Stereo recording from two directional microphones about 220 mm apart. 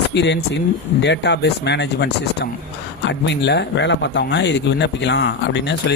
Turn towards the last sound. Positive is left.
turn(degrees=50)  # may be behind; listen again after turning